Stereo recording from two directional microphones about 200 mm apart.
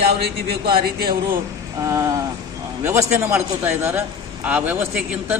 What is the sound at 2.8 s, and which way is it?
A man's voice, 15° right (ahead or behind).